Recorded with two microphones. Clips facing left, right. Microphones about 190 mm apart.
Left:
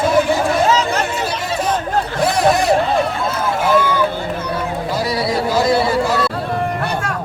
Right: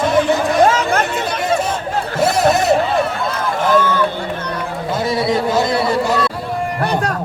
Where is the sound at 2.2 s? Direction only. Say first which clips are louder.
Right 1 dB; 25° right (ahead or behind).